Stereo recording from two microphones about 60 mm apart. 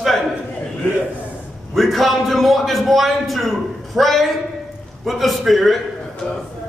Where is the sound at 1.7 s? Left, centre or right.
Centre.